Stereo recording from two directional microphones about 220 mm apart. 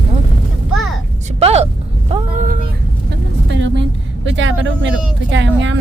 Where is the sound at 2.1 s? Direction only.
35° right (ahead or behind).